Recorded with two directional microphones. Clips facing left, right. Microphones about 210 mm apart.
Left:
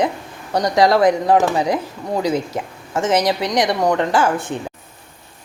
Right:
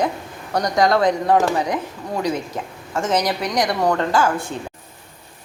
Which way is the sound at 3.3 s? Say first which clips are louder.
Left 3 dB; 25° left (ahead or behind).